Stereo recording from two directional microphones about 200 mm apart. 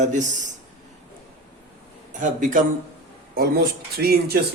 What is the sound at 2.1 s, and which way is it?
A man's voice, 40° right (ahead or behind).